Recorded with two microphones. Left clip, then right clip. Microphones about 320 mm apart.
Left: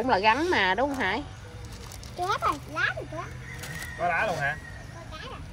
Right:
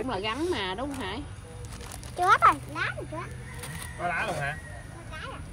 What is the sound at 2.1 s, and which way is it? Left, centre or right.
Speech, right.